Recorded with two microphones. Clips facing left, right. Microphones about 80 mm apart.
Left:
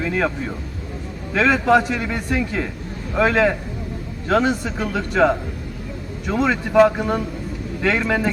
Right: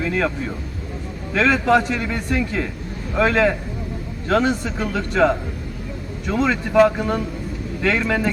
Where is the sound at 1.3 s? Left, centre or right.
Centre.